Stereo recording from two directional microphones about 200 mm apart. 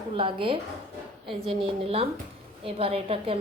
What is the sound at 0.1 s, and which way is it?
A woman's voice, 25° right (ahead or behind).